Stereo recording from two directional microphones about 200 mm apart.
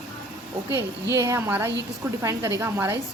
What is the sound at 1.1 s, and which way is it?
Speech, 15° right (ahead or behind).